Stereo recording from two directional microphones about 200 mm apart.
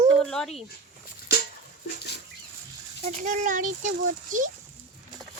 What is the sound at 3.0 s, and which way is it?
Speech, 40° right (ahead or behind).